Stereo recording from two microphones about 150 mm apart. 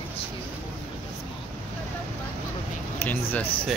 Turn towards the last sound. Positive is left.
turn(degrees=10)  # may be behind; listen again after turning